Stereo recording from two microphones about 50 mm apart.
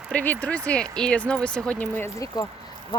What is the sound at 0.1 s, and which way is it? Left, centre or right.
Speech, left.